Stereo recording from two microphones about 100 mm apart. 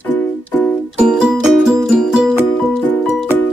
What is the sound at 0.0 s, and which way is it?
Music, 10° left (ahead or behind).